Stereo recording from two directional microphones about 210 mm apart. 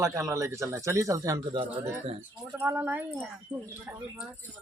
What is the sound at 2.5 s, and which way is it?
Speech, 10° right (ahead or behind).